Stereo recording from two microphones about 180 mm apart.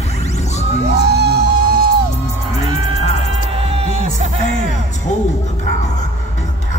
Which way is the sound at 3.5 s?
30° right (ahead or behind).